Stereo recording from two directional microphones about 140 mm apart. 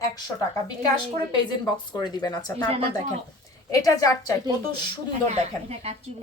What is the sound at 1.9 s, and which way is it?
Speech, 30° left (ahead or behind).